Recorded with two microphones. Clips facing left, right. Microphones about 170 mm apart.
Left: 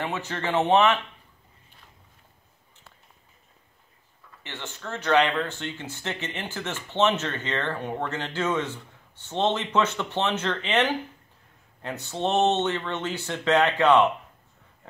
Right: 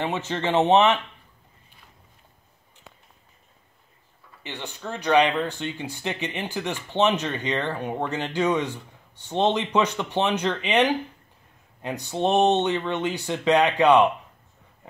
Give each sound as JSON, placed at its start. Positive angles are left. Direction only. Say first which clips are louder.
{"t": 0.0, "sound": "speech", "louder": "right 3 dB", "side_deg": -20}
{"t": 4.4, "sound": "speech", "louder": "right 3 dB", "side_deg": -15}